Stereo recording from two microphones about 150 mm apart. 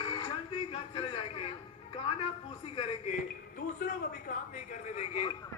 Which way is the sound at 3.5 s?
80° left.